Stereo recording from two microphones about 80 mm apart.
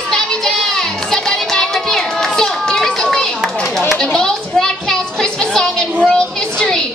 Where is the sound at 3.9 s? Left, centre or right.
Centre.